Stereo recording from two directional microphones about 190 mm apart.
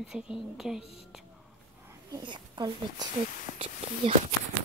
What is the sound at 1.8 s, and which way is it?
Speech, 20° right (ahead or behind).